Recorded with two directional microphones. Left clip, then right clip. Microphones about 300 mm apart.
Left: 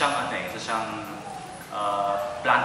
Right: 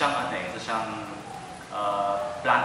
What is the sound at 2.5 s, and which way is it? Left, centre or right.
Speech, centre.